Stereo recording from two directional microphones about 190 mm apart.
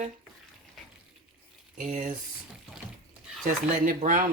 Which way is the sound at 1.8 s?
40° right (ahead or behind).